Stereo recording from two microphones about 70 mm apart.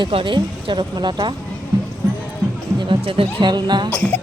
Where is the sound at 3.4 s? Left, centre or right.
Right.